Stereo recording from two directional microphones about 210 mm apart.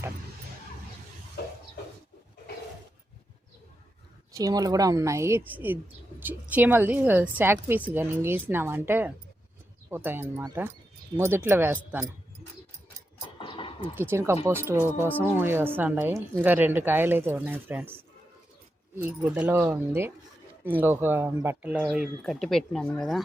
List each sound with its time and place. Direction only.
4.3 s speech: 15° right (ahead or behind)
13.4 s a sound: 25° left (ahead or behind)
13.9 s speech: 10° right (ahead or behind)